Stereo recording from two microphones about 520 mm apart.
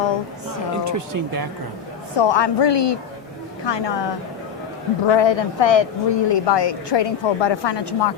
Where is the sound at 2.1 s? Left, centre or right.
Left.